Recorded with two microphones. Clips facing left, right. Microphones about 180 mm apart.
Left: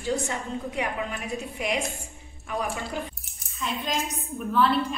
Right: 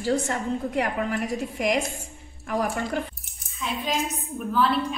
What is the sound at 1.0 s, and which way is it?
Speech, 65° right (ahead or behind).